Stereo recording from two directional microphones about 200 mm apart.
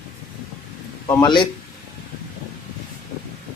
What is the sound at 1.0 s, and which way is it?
Speech, 20° left (ahead or behind).